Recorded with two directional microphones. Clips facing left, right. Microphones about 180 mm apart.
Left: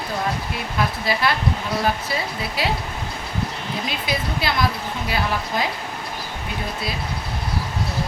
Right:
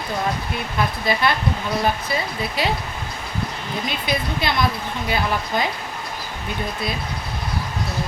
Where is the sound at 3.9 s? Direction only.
5° left (ahead or behind).